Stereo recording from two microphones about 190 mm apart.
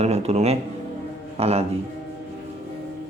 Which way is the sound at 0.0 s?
35° right (ahead or behind).